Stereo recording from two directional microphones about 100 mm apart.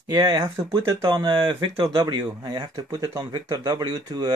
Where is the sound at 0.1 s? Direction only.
40° right (ahead or behind); by 2.0 s 60° right (ahead or behind).